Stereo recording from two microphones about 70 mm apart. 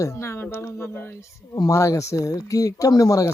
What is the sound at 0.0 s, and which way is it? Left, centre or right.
Speech, left.